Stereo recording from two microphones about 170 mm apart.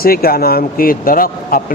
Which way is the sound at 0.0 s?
60° left (ahead or behind).